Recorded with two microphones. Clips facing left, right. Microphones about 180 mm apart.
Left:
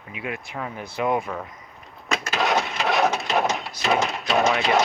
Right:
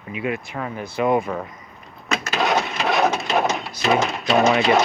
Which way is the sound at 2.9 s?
10° right (ahead or behind).